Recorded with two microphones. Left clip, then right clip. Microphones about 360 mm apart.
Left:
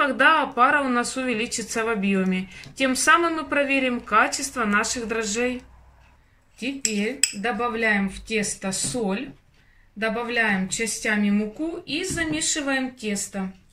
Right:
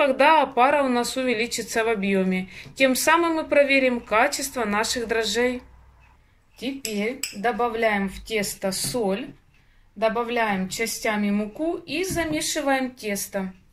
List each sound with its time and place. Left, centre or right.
0.0 s speech: centre
7.0 s speech: centre
9.9 s speech: centre